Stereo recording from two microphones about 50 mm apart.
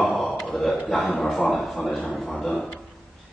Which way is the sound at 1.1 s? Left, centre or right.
Centre.